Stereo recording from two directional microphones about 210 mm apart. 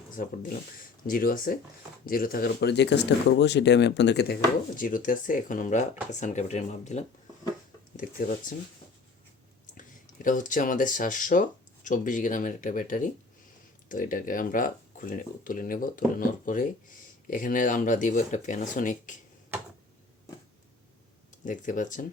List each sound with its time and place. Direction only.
0.2 s speech: 40° left (ahead or behind)
4.8 s speech: 40° left (ahead or behind)
10.2 s speech: 40° left (ahead or behind)
21.4 s speech: 40° left (ahead or behind)